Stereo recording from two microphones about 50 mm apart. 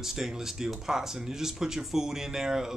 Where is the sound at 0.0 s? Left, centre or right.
Centre.